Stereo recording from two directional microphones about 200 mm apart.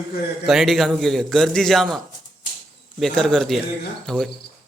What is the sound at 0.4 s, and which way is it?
A man's voice, centre (ahead or behind).